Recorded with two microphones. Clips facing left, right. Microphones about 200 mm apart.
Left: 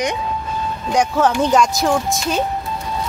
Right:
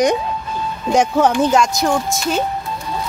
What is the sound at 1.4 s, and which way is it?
Speech, centre (ahead or behind).